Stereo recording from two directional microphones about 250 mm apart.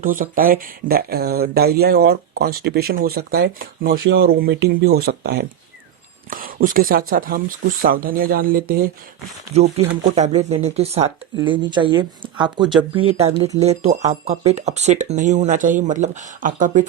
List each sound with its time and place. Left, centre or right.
0.0 s speech: right
3.9 s speech: right
10.2 s speech: right